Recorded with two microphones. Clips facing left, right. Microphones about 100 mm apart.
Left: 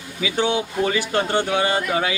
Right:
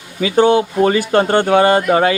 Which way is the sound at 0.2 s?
50° right (ahead or behind).